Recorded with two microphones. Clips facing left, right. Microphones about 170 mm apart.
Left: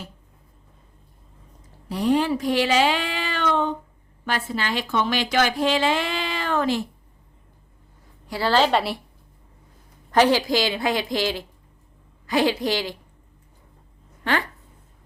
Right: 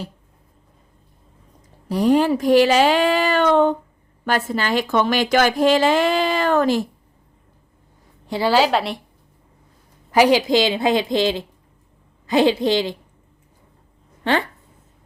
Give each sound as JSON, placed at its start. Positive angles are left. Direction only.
{"t": 1.9, "sound": "a woman's voice", "side_deg": -45}
{"t": 8.3, "sound": "a woman's voice", "side_deg": -15}
{"t": 10.1, "sound": "a woman's voice", "side_deg": -10}